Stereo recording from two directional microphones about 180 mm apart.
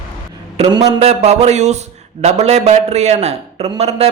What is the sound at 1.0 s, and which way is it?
A man's voice, 35° right (ahead or behind).